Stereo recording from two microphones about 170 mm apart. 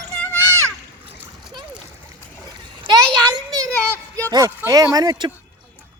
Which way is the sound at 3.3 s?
20° right (ahead or behind).